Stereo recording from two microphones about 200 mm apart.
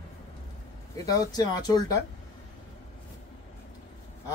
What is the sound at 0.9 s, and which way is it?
Speech, 15° left (ahead or behind).